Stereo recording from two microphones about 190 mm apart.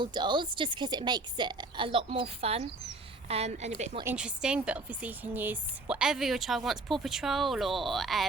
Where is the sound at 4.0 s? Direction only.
10° right (ahead or behind).